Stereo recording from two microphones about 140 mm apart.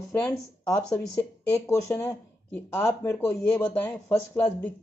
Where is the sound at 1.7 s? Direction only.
20° left (ahead or behind).